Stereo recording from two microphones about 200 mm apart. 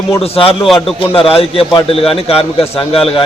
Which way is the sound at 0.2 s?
25° left (ahead or behind).